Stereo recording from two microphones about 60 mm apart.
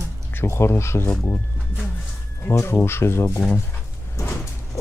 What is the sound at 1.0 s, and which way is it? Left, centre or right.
Speech, left.